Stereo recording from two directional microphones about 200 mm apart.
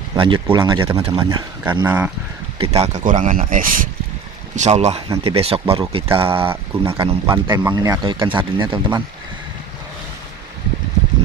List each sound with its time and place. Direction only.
0.1 s speech: 25° right (ahead or behind)
1.7 s speech: 10° right (ahead or behind)
2.6 s speech: 30° right (ahead or behind)
4.6 s speech: 35° right (ahead or behind)
6.2 s speech: 10° right (ahead or behind)
6.9 s speech: 30° right (ahead or behind)
7.2 s speech: 10° right (ahead or behind)